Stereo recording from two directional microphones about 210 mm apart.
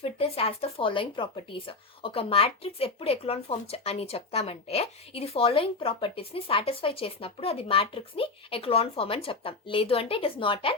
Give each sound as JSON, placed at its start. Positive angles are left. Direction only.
{"t": 0.0, "sound": "speech", "side_deg": 25}